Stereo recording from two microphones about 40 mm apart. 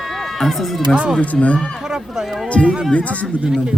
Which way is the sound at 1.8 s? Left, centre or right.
Centre.